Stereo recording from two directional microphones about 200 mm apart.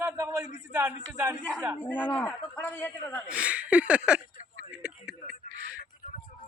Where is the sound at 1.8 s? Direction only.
10° left (ahead or behind).